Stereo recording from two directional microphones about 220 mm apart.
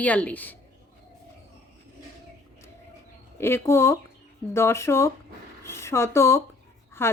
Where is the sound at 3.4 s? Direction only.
10° left (ahead or behind).